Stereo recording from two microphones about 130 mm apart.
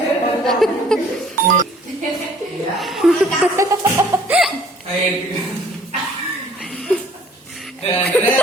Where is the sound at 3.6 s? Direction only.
20° right (ahead or behind).